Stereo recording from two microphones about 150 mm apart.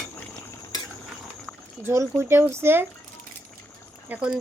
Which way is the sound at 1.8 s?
15° right (ahead or behind).